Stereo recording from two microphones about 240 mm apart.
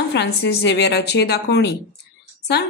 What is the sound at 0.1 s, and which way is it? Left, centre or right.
A woman's voice, left.